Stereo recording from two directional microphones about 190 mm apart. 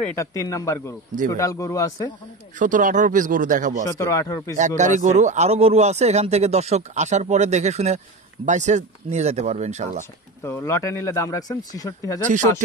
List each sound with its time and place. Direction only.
0.1 s speech: 15° left (ahead or behind)
2.6 s speech: 45° right (ahead or behind)
3.8 s speech: 15° left (ahead or behind)
4.6 s speech: 40° right (ahead or behind)
10.4 s speech: 15° left (ahead or behind)